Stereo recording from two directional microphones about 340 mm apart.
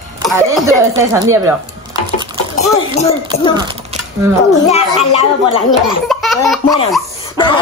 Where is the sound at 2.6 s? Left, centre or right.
Centre.